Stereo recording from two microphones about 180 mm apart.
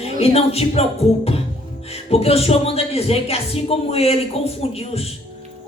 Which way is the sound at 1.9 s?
35° left (ahead or behind).